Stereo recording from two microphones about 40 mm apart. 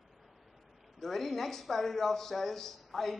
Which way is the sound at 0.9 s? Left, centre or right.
Centre.